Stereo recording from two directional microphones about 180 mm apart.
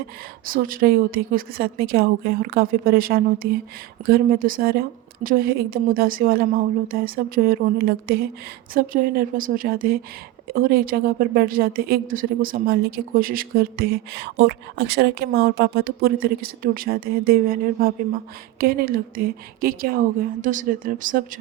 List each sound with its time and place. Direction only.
0.4 s a woman's voice: 50° right (ahead or behind)